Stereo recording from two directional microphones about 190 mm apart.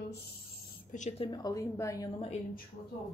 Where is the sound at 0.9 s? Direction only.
40° left (ahead or behind).